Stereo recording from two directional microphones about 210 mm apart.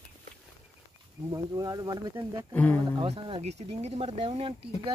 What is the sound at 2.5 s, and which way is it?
Speech, 10° left (ahead or behind).